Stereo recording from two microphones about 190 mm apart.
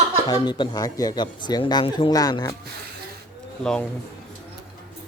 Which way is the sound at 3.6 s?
5° left (ahead or behind).